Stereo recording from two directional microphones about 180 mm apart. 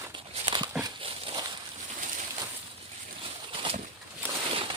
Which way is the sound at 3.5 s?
30° right (ahead or behind).